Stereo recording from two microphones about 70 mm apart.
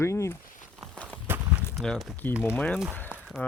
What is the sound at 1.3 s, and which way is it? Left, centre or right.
Walk, right.